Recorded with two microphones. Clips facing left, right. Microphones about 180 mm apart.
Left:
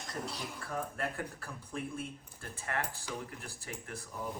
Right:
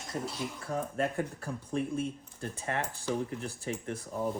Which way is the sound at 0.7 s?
20° right (ahead or behind).